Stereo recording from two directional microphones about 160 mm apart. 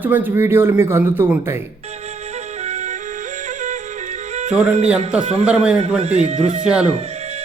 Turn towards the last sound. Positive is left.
turn(degrees=-40)  # may be behind; listen again after turning